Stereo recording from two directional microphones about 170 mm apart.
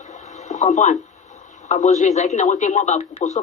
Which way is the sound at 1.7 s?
45° left (ahead or behind).